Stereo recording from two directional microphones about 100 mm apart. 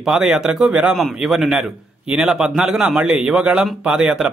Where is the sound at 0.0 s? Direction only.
5° right (ahead or behind).